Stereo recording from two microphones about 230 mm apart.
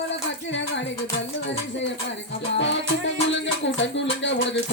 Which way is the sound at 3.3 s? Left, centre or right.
Left.